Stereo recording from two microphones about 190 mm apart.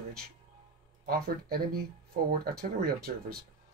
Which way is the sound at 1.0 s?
50° right (ahead or behind).